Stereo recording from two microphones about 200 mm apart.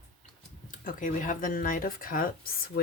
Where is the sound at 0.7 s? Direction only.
40° left (ahead or behind).